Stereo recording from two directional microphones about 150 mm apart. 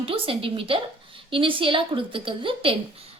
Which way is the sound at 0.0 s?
40° right (ahead or behind).